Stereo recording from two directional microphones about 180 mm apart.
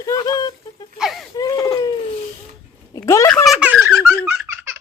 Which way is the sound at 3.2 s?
5° left (ahead or behind).